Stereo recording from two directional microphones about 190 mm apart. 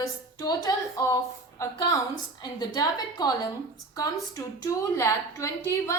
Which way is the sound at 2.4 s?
20° left (ahead or behind).